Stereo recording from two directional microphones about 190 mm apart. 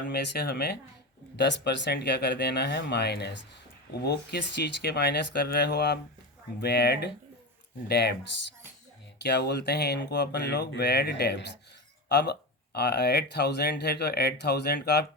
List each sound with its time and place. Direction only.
0.1 s speech: 60° left (ahead or behind)
9.2 s speech: 60° left (ahead or behind)